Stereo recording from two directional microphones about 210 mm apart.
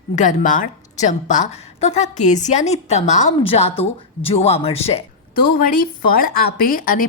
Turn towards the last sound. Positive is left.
turn(degrees=40)  # may be behind; listen again after turning